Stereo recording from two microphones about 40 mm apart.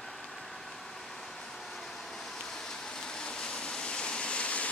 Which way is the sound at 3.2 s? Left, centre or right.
Left.